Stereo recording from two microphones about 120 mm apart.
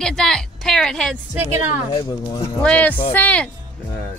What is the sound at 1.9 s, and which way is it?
Speech, 30° left (ahead or behind).